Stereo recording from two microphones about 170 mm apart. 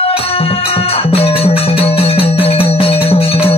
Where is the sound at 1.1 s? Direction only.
35° left (ahead or behind).